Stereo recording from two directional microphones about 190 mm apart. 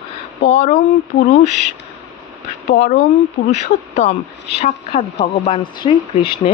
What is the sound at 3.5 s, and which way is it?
Speech, 40° left (ahead or behind).